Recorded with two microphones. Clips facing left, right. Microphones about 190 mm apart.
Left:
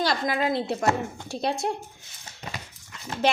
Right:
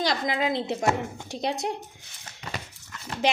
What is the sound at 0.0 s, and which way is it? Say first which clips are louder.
A woman's voice: left 1 dB; 20° right (ahead or behind).